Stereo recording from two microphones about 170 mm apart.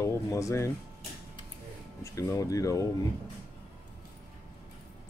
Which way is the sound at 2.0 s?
20° left (ahead or behind).